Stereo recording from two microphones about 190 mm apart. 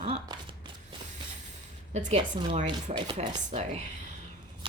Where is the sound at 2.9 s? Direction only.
25° right (ahead or behind).